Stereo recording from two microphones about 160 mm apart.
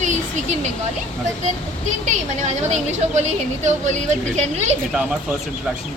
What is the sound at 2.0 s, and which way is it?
A woman's voice, 45° right (ahead or behind).